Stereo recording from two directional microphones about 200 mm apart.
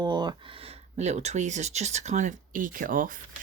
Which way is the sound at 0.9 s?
35° right (ahead or behind).